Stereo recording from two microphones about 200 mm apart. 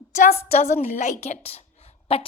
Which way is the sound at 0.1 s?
40° left (ahead or behind).